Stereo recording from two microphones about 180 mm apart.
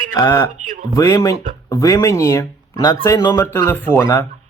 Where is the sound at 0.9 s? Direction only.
20° left (ahead or behind).